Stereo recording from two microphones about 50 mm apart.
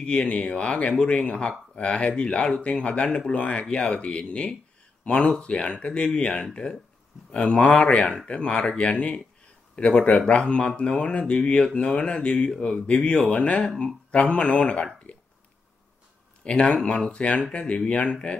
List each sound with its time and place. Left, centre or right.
0.0 s speech: left
15.1 s a sound: left
16.4 s speech: centre